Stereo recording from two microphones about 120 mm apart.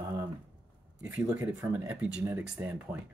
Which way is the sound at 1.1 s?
15° right (ahead or behind).